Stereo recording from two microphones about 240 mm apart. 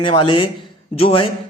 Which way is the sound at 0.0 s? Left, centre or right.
Left.